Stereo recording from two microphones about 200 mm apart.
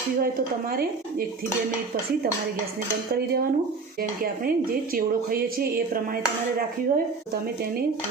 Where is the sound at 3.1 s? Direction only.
50° right (ahead or behind).